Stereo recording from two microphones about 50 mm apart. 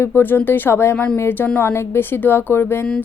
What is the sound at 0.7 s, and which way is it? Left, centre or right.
Speech, left.